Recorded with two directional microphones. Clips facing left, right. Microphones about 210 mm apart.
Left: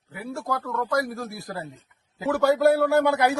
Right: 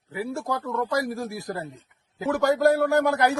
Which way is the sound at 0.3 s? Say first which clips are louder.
Left 3 dB; 25° right (ahead or behind).